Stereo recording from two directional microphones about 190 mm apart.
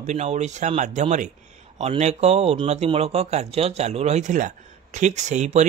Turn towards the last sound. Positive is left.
turn(degrees=-40)  # may be behind; listen again after turning